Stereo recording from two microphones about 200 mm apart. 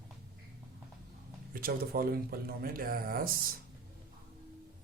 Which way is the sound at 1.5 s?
50° right (ahead or behind).